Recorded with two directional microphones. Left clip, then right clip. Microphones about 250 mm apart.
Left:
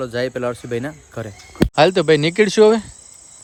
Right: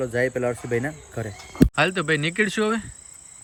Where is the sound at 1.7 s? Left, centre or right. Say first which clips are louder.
Left 12 dB; centre.